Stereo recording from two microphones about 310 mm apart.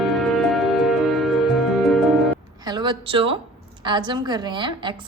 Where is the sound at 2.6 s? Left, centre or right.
Centre.